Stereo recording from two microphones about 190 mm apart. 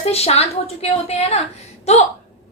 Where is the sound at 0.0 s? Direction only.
35° left (ahead or behind).